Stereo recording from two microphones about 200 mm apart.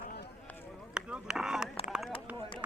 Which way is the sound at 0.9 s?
5° right (ahead or behind).